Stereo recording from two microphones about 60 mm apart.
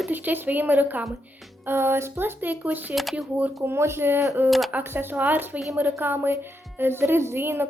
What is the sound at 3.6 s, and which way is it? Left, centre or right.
A woman's voice, right.